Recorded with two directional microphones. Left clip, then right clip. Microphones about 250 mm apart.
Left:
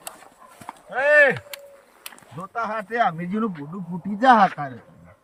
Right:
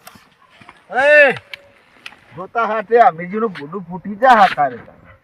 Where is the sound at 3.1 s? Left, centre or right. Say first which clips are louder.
Right 10 dB; right.